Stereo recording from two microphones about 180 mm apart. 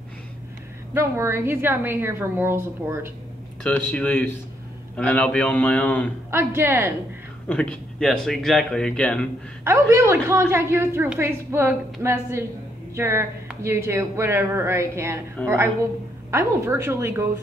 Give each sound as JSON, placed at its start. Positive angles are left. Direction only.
{"t": 0.9, "sound": "a woman's voice", "side_deg": -15}
{"t": 3.6, "sound": "a man's voice", "side_deg": 10}
{"t": 6.3, "sound": "a woman's voice", "side_deg": -15}
{"t": 7.4, "sound": "speech", "side_deg": 5}
{"t": 9.7, "sound": "a woman's voice", "side_deg": -15}
{"t": 15.4, "sound": "a man's voice", "side_deg": 5}
{"t": 16.3, "sound": "a woman's voice", "side_deg": -15}